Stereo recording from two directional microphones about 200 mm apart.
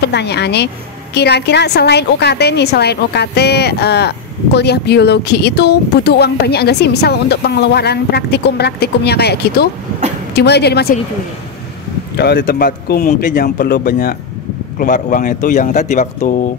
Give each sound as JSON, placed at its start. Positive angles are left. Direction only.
{"t": 0.0, "sound": "a woman's voice", "side_deg": 55}
{"t": 12.2, "sound": "speech", "side_deg": 55}